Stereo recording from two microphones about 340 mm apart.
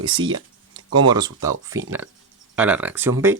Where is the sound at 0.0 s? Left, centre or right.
Centre.